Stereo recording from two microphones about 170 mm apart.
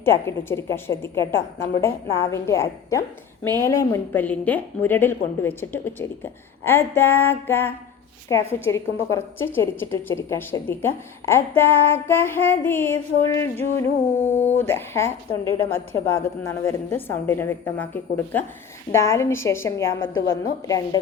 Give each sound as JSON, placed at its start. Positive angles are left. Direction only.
{"t": 0.0, "sound": "a woman's voice", "side_deg": 15}
{"t": 14.3, "sound": "speech", "side_deg": 40}
{"t": 14.6, "sound": "a woman's voice", "side_deg": 15}